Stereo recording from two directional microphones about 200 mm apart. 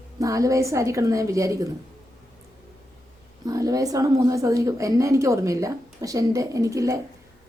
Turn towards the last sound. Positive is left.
turn(degrees=-15)  # may be behind; listen again after turning